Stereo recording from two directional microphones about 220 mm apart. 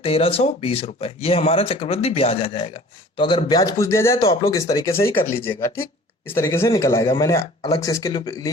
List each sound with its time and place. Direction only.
0.0 s speech: 25° left (ahead or behind)
4.2 s speech: 25° left (ahead or behind)